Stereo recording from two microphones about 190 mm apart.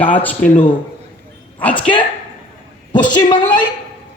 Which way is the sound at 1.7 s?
25° left (ahead or behind).